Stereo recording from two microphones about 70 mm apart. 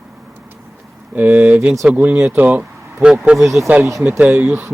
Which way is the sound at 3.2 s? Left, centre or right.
Centre.